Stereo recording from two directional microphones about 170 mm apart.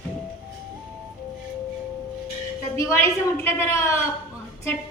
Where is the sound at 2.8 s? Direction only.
15° left (ahead or behind).